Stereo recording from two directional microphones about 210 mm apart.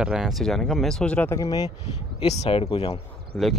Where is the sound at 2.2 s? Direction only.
30° left (ahead or behind).